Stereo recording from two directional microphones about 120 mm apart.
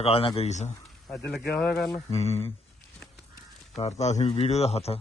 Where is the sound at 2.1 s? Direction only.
60° left (ahead or behind).